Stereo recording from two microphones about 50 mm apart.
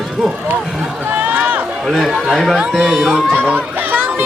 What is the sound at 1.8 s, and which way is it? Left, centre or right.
Speech, centre.